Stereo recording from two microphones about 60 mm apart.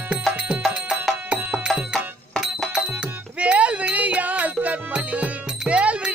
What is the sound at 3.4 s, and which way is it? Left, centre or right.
Music, right.